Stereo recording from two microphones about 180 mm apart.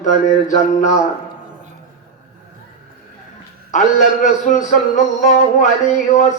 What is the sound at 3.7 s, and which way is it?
Music, 45° left (ahead or behind).